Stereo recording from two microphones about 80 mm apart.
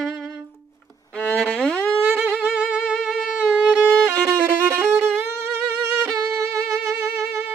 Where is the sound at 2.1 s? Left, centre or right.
Centre.